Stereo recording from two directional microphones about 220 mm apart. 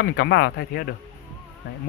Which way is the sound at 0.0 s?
50° left (ahead or behind).